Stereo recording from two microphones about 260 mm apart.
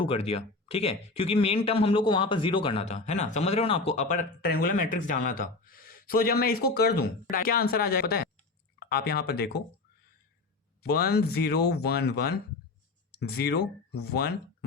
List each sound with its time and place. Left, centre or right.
0.0 s speech: left
10.8 s speech: left